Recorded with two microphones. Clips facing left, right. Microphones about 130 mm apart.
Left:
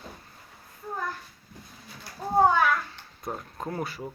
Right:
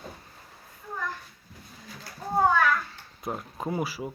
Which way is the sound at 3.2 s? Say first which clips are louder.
Right 2 dB; 10° right (ahead or behind).